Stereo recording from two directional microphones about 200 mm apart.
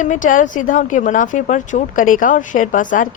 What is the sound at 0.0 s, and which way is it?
A woman's voice, 40° left (ahead or behind).